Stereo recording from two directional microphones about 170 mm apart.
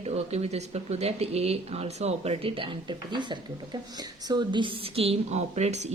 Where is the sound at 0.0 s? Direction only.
40° right (ahead or behind).